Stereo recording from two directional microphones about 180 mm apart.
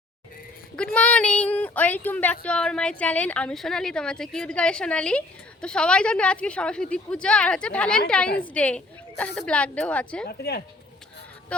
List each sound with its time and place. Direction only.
0.9 s speech: 5° left (ahead or behind)
10.2 s a woman's voice: 60° left (ahead or behind)